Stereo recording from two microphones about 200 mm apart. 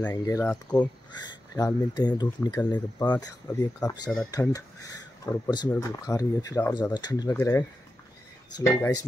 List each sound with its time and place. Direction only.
0.0 s speech: 15° left (ahead or behind)